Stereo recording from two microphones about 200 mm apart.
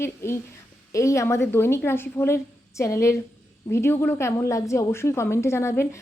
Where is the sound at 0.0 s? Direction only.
15° left (ahead or behind).